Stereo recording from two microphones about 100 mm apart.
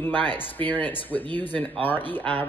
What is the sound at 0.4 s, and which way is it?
Speech, 15° left (ahead or behind).